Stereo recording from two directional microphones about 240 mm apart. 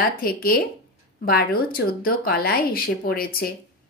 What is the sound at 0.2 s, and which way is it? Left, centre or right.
Speech, left.